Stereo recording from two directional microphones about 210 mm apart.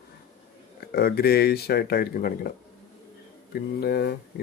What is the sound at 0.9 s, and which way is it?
Speech, 50° left (ahead or behind).